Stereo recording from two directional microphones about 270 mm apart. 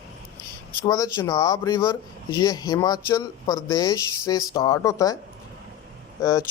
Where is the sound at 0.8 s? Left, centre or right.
Centre.